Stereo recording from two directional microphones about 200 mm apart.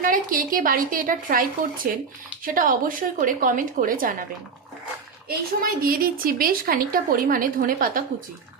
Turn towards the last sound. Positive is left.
turn(degrees=-45)  # may be behind; listen again after turning